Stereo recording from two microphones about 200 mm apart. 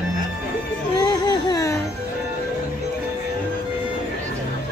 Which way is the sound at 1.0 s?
20° left (ahead or behind).